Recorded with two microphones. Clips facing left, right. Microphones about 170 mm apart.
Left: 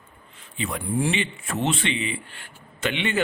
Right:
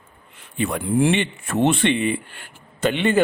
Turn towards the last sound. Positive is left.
turn(degrees=-45)  # may be behind; listen again after turning